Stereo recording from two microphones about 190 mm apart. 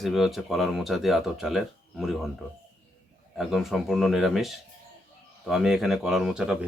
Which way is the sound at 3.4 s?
Centre (ahead or behind).